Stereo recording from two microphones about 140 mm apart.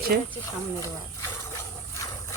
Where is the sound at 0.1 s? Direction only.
90° right.